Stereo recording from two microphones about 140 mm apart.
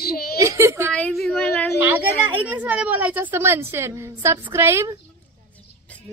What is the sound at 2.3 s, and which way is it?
A woman's voice, 10° right (ahead or behind).